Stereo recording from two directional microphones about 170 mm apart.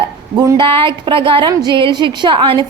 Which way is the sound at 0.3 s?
30° right (ahead or behind).